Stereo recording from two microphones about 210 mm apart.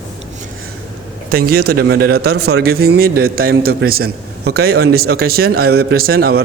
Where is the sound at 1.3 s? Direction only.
45° right (ahead or behind).